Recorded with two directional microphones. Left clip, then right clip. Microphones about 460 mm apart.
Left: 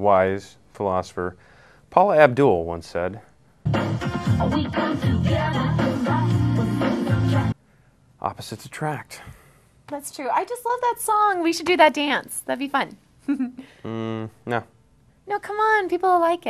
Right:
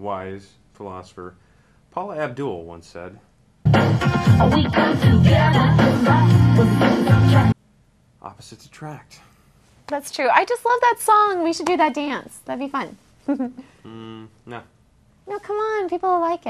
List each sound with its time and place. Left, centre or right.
0.0 s speech: left
3.6 s music: centre
8.2 s speech: left
9.8 s a woman's voice: centre
11.2 s music: centre
13.8 s speech: left
15.2 s music: centre